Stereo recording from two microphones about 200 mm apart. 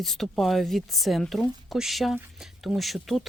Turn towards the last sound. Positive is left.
turn(degrees=0)  # may be behind; listen again after turning